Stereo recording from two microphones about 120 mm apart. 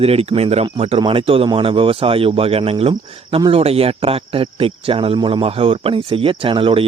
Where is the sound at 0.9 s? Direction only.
45° right (ahead or behind).